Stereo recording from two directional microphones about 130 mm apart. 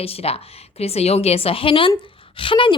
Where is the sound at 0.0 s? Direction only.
50° left (ahead or behind).